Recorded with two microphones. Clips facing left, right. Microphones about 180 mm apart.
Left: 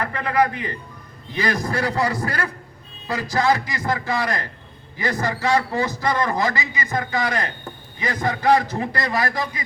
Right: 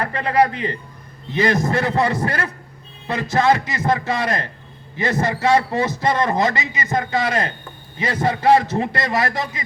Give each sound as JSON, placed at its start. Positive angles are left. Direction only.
{"t": 0.0, "sound": "a man's voice", "side_deg": -25}